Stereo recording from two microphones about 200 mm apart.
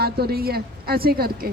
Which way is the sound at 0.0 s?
50° right (ahead or behind).